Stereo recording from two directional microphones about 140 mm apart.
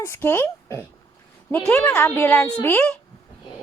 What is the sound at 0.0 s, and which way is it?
A woman's voice, 15° left (ahead or behind).